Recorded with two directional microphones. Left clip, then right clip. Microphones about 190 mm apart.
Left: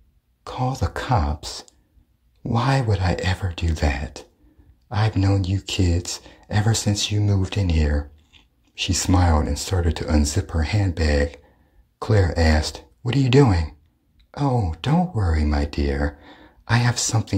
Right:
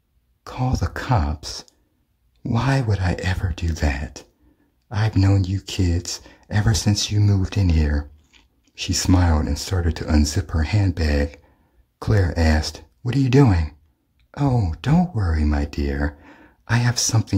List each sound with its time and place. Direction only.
0.4 s speech: 15° right (ahead or behind)